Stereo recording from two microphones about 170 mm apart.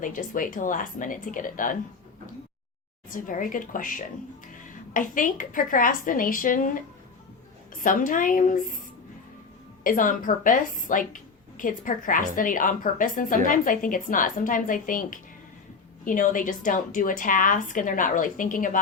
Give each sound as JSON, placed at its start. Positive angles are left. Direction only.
{"t": 0.0, "sound": "a woman's voice", "side_deg": 50}
{"t": 3.1, "sound": "a woman's voice", "side_deg": 55}
{"t": 7.8, "sound": "a woman's voice", "side_deg": 50}
{"t": 9.8, "sound": "a woman's voice", "side_deg": 50}